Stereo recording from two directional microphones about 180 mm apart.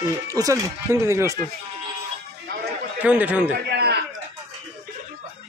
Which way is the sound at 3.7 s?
65° right (ahead or behind).